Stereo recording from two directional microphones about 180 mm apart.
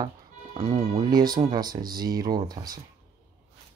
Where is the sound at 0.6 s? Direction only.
35° right (ahead or behind).